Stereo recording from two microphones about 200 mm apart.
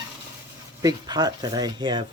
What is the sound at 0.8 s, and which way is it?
Speech, 20° right (ahead or behind).